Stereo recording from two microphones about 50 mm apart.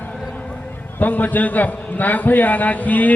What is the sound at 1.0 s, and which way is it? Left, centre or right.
A man's voice, left.